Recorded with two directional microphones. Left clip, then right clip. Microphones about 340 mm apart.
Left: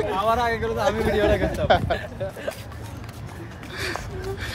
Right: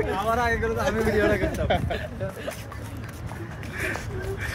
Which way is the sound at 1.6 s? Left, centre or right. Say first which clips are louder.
Left 10 dB; centre.